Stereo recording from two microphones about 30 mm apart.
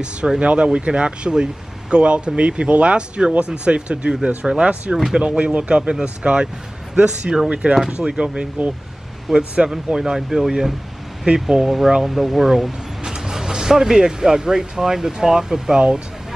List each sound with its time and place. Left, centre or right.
0.4 s speech: right
5.4 s speech: right
7.4 s speech: right
9.3 s speech: centre
13.0 s speech: right